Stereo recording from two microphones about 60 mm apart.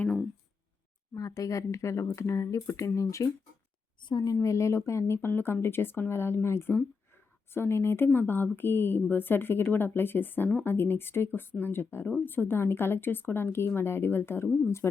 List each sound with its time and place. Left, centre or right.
1.1 s speech: left
4.4 s speech: left
4.9 s a woman's voice: left